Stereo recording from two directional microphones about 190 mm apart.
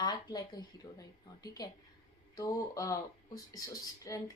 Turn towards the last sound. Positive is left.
turn(degrees=15)  # may be behind; listen again after turning